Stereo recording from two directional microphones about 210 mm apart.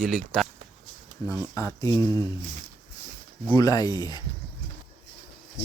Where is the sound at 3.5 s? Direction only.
15° left (ahead or behind).